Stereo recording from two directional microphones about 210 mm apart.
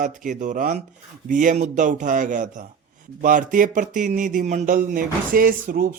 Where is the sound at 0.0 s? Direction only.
40° right (ahead or behind).